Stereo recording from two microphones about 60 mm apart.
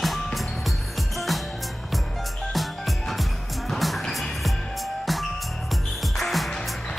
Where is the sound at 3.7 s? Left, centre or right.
Centre.